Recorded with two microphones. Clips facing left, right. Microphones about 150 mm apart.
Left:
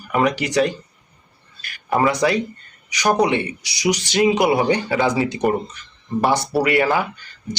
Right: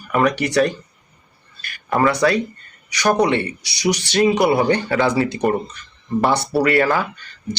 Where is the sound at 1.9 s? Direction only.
15° left (ahead or behind).